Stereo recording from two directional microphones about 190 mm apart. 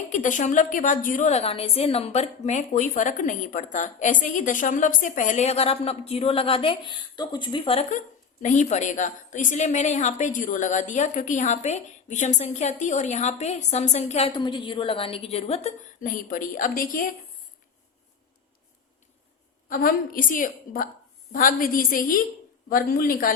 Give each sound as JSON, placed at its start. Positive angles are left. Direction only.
{"t": 0.1, "sound": "a woman's voice", "side_deg": 40}
{"t": 19.6, "sound": "a woman's voice", "side_deg": 45}